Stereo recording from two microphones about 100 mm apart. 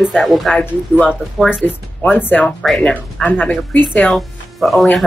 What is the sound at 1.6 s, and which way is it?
Speech, 20° left (ahead or behind).